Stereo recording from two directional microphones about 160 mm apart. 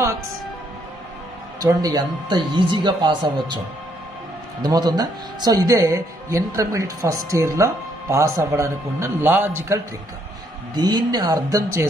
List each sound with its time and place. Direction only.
1.6 s a man's voice: 20° right (ahead or behind)
10.8 s speech: 25° right (ahead or behind)